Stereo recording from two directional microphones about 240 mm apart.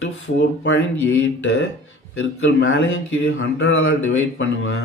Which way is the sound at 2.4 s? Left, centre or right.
Left.